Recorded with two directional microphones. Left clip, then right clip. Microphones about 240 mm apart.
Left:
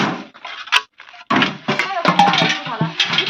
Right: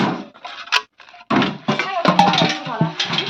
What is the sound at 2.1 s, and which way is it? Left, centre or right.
Music, right.